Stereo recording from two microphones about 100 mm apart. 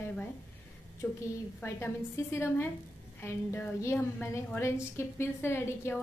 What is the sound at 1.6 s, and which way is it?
A woman's voice, 25° left (ahead or behind).